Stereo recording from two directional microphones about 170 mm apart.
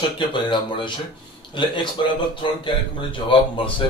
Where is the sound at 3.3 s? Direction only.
30° left (ahead or behind).